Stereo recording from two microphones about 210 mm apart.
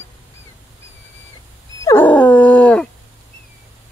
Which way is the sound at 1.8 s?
10° left (ahead or behind).